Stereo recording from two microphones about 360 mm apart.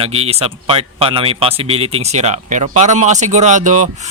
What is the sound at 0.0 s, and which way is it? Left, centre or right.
A man's voice, centre.